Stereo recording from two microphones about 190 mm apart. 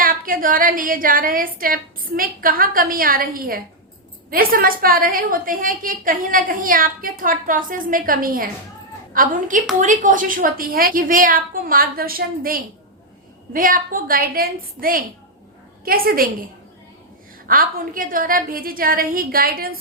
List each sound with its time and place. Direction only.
0.0 s a woman's voice: 50° right (ahead or behind)
17.5 s a woman's voice: 45° right (ahead or behind)